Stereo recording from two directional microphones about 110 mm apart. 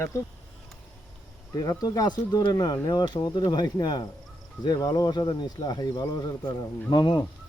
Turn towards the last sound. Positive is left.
turn(degrees=40)  # may be behind; listen again after turning